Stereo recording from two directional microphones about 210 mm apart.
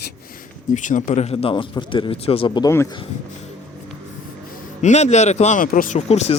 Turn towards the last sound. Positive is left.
turn(degrees=30)  # may be behind; listen again after turning